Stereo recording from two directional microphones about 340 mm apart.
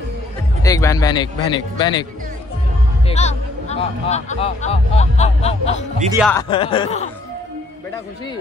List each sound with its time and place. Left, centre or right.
0.6 s a man's voice: centre
3.1 s speech: centre
6.1 s speech: centre
6.5 s a man's voice: centre